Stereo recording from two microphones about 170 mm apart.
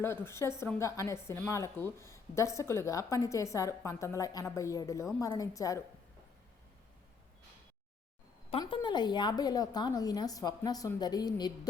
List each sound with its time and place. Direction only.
0.0 s a woman's voice: 15° left (ahead or behind)
8.4 s a woman's voice: 30° left (ahead or behind)